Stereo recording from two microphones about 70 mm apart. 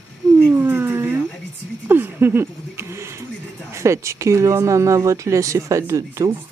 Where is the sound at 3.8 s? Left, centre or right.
Right.